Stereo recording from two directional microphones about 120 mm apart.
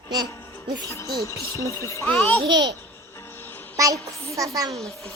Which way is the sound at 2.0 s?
15° left (ahead or behind).